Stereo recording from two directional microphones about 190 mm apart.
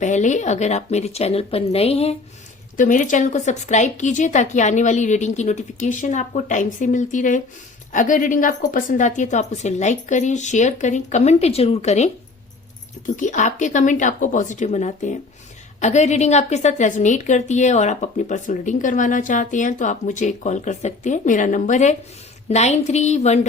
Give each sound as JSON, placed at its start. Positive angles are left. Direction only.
{"t": 0.0, "sound": "a woman's voice", "side_deg": 40}
{"t": 2.7, "sound": "a woman's voice", "side_deg": 45}
{"t": 13.1, "sound": "a woman's voice", "side_deg": 40}